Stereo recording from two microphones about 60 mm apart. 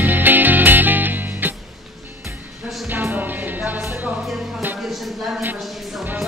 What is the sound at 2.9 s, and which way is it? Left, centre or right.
Music, right.